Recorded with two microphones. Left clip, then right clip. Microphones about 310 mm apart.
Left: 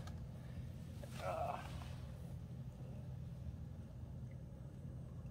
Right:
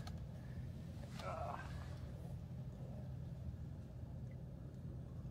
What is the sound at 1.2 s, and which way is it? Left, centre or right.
Sheep, left.